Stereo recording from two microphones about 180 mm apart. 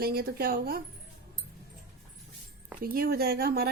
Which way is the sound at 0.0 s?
60° right (ahead or behind).